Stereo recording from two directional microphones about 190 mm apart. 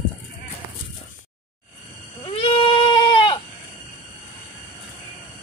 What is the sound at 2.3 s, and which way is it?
Goat, 30° left (ahead or behind).